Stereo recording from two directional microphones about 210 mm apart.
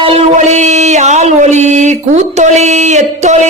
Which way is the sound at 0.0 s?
35° right (ahead or behind).